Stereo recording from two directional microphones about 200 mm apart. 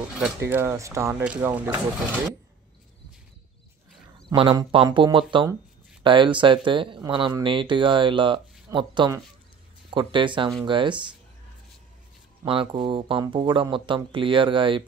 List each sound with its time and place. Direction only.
0.1 s speech: 10° right (ahead or behind)
4.3 s speech: 20° right (ahead or behind)
12.4 s speech: 25° right (ahead or behind)